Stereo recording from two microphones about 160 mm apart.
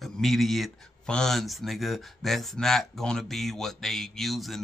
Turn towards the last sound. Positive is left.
turn(degrees=0)  # may be behind; listen again after turning